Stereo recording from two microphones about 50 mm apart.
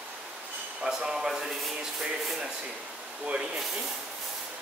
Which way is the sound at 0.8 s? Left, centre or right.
Centre.